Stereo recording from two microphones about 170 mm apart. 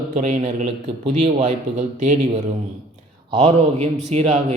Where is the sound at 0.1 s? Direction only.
45° right (ahead or behind).